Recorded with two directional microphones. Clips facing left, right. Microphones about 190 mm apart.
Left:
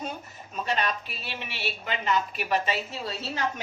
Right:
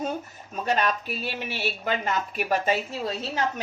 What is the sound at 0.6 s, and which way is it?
Speech, 45° right (ahead or behind).